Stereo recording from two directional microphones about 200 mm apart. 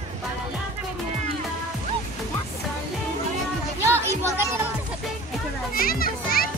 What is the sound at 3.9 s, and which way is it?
Music, 10° right (ahead or behind).